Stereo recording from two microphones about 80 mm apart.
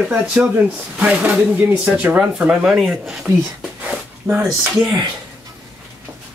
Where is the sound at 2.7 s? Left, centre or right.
Centre.